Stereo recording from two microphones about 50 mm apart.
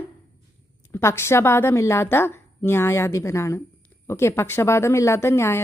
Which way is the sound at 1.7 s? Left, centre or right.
Left.